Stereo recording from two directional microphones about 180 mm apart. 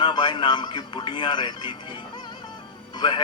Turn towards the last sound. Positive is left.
turn(degrees=25)  # may be behind; listen again after turning